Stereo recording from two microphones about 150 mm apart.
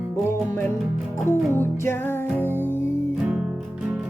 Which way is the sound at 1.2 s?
15° left (ahead or behind).